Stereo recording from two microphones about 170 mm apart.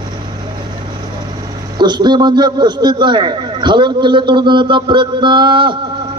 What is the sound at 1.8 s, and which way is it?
A man's voice, 25° right (ahead or behind).